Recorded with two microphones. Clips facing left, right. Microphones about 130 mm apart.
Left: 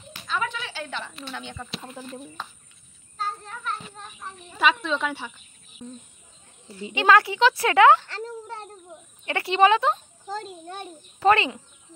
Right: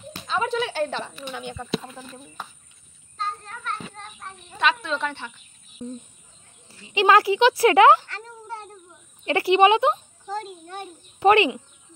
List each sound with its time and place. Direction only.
0.5 s speech: 50° right (ahead or behind)
1.3 s speech: 5° right (ahead or behind)
3.2 s child singing: 5° left (ahead or behind)
4.2 s speech: 5° left (ahead or behind)
7.0 s speech: 25° right (ahead or behind)
9.2 s speech: 25° right (ahead or behind)
10.3 s a child's voice: 35° left (ahead or behind)
11.1 s speech: 20° right (ahead or behind)